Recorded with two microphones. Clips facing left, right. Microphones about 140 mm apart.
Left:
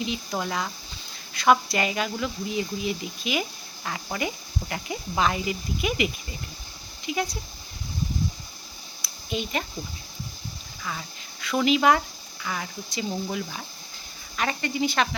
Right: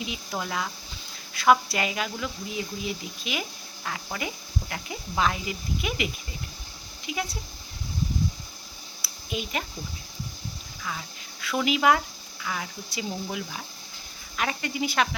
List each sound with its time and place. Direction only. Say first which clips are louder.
0.3 s speech: left 2 dB; centre (ahead or behind)
7.1 s speech: left 4 dB; centre (ahead or behind)
9.0 s a sound: left 3 dB; 5° right (ahead or behind)
10.8 s speech: left 1 dB; centre (ahead or behind)